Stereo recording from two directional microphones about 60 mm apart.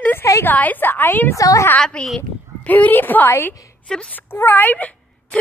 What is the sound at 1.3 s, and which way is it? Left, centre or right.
Speech, left.